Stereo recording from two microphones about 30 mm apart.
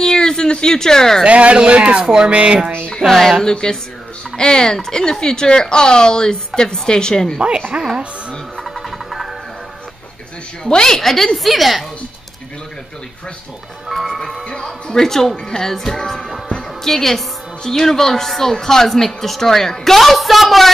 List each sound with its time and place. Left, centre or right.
0.0 s a sound: left
1.2 s speech: right
3.1 s speech: centre
4.4 s a woman's voice: left
7.3 s speech: right
8.6 s music: centre
10.8 s speech: centre
13.8 s speech: centre
15.0 s speech: centre
20.0 s speech: centre